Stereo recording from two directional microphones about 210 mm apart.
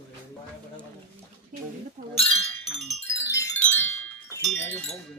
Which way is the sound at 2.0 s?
40° right (ahead or behind).